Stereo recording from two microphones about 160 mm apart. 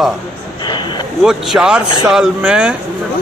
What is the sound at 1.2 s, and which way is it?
A man's voice, 5° right (ahead or behind).